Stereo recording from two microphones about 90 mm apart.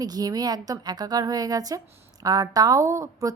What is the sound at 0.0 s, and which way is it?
A woman's voice, 45° right (ahead or behind).